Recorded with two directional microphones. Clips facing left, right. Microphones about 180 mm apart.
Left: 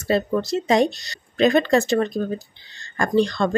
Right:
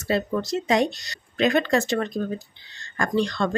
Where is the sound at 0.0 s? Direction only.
30° left (ahead or behind).